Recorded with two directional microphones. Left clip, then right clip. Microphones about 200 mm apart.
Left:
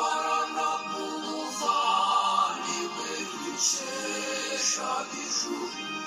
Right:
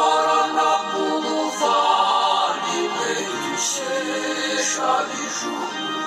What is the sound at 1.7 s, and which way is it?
Music, 55° right (ahead or behind).